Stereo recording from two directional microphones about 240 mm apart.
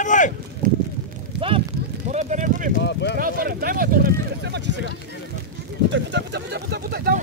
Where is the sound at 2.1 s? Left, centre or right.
Right.